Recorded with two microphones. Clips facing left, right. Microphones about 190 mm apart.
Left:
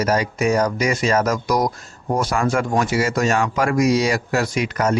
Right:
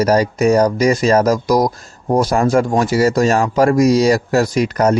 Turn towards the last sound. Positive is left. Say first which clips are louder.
# right 6 dB
turn(degrees=-40)  # may be behind; listen again after turning